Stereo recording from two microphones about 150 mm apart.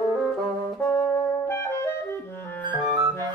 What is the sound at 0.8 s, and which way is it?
Music, 20° left (ahead or behind).